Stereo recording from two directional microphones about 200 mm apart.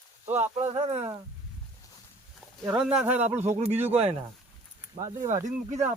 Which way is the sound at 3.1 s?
35° right (ahead or behind).